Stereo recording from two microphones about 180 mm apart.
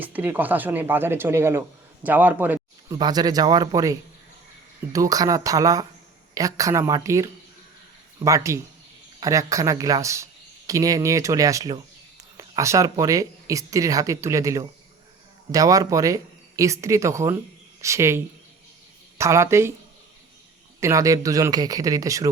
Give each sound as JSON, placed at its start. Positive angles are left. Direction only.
{"t": 0.0, "sound": "speech", "side_deg": -10}
{"t": 3.0, "sound": "speech", "side_deg": -20}
{"t": 20.8, "sound": "speech", "side_deg": -20}